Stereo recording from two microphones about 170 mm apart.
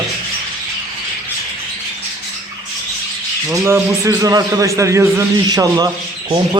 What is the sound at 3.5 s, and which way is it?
A man's voice, 15° right (ahead or behind).